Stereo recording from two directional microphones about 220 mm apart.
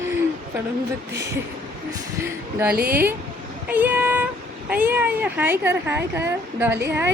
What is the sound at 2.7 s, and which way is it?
Speech, 45° right (ahead or behind).